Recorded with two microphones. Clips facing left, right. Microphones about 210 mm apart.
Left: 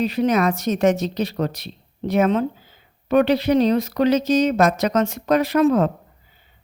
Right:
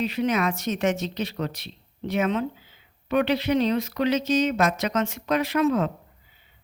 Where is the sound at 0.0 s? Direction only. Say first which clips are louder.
Left 5 dB; 40° left (ahead or behind).